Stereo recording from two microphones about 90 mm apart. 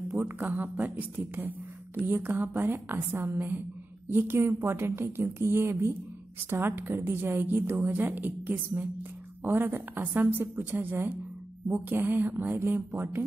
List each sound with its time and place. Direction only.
0.1 s a woman's voice: 20° right (ahead or behind)